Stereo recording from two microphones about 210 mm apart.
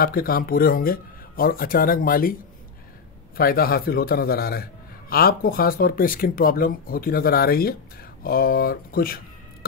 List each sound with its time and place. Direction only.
0.0 s speech: 45° left (ahead or behind)
3.3 s speech: 45° left (ahead or behind)